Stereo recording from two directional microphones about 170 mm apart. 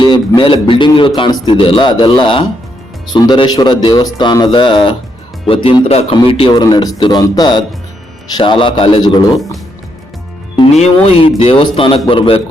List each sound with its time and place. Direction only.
0.0 s a man's voice: 25° left (ahead or behind)
10.6 s speech: 40° left (ahead or behind)